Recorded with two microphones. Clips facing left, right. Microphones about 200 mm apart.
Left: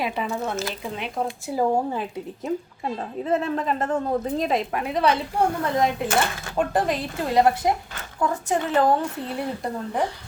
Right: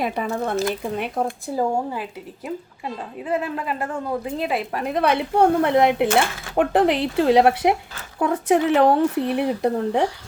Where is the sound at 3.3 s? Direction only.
10° right (ahead or behind).